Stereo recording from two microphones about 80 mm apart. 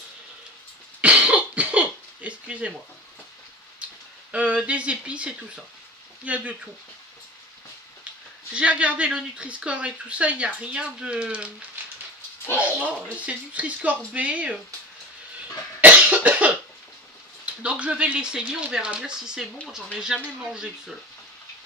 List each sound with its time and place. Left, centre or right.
1.0 s cough: centre
4.3 s speech: centre
8.5 s speech: centre
12.5 s speech: centre
15.8 s cough: centre
17.5 s speech: centre